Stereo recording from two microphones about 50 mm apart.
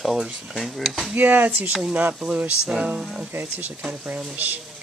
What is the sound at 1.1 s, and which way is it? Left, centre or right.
Speech, right.